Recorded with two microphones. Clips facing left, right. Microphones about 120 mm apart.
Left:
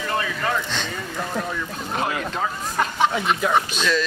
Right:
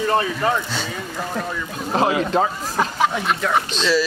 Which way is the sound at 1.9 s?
30° right (ahead or behind).